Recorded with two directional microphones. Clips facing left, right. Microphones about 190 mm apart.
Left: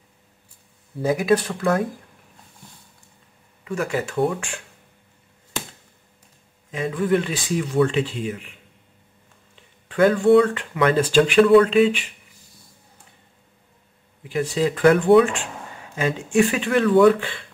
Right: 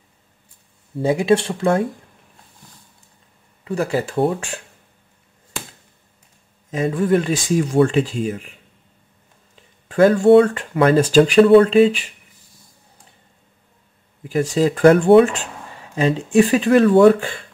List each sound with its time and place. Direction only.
0.9 s speech: 25° right (ahead or behind)
3.6 s speech: 35° right (ahead or behind)
6.7 s speech: 45° right (ahead or behind)
9.8 s speech: 40° right (ahead or behind)
14.3 s speech: 40° right (ahead or behind); by 17.2 s 25° right (ahead or behind)
17.2 s speech: 45° right (ahead or behind)